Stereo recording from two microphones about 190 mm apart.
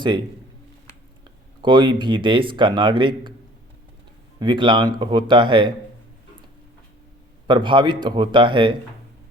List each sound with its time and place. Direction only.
1.6 s speech: 25° right (ahead or behind)
4.4 s speech: 25° right (ahead or behind)
7.4 s speech: 25° right (ahead or behind)